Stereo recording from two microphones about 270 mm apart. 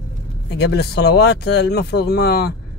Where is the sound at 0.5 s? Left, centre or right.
Left.